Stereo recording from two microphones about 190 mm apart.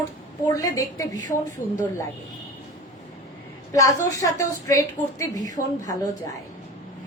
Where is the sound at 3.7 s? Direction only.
15° left (ahead or behind).